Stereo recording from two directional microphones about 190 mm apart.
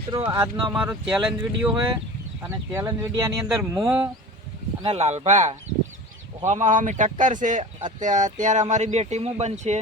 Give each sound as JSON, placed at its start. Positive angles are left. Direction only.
{"t": 0.1, "sound": "speech", "side_deg": -20}
{"t": 0.5, "sound": "speech", "side_deg": -5}
{"t": 2.4, "sound": "speech", "side_deg": -15}
{"t": 4.8, "sound": "speech", "side_deg": -35}